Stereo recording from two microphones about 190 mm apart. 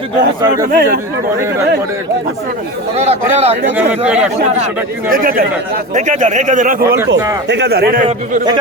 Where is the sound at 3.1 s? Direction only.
35° right (ahead or behind).